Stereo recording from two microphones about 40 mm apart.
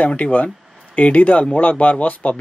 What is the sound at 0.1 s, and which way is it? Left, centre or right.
Speech, left.